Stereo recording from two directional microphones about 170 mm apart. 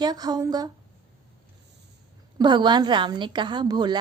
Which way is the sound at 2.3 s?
25° right (ahead or behind).